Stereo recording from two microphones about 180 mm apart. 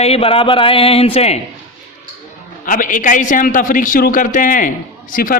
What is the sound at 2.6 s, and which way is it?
A man's voice, 50° left (ahead or behind).